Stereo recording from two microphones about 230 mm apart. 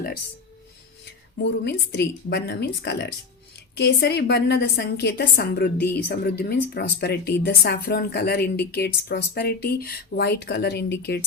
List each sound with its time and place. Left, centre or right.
1.6 s a woman's voice: left